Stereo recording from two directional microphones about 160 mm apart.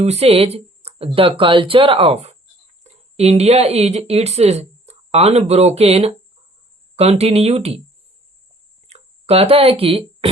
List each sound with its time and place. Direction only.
0.0 s speech: 40° right (ahead or behind)
8.9 s speech: 40° right (ahead or behind)